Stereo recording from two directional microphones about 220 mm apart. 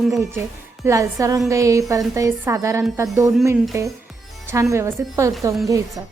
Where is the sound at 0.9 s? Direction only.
15° right (ahead or behind).